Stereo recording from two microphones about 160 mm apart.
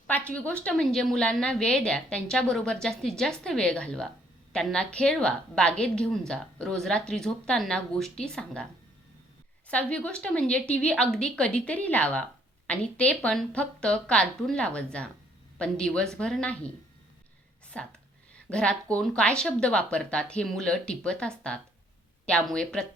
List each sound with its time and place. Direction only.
0.1 s a woman's voice: 10° left (ahead or behind)
9.6 s a woman's voice: 5° left (ahead or behind)
17.7 s a woman's voice: 10° left (ahead or behind)